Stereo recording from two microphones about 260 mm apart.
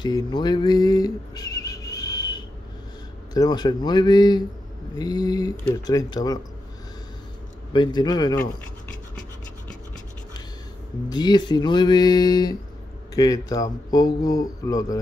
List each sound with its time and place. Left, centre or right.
0.0 s a sound: centre
3.3 s speech: centre
7.7 s speech: centre
11.1 s speech: centre